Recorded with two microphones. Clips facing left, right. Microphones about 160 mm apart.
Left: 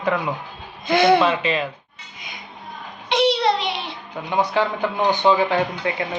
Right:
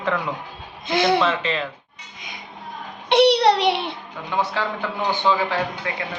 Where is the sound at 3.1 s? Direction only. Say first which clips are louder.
Right 3 dB; 70° right (ahead or behind).